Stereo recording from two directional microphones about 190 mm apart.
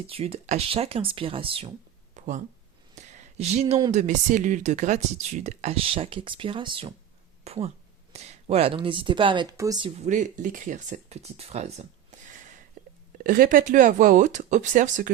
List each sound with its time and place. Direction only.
0.1 s speech: 30° right (ahead or behind)
2.1 s a sound: 40° right (ahead or behind)
3.9 s speech: 40° right (ahead or behind); by 9.9 s 20° right (ahead or behind)
10.0 s speech: 40° right (ahead or behind)